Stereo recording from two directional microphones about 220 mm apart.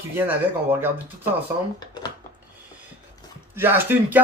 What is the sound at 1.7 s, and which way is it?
Speech, 20° left (ahead or behind).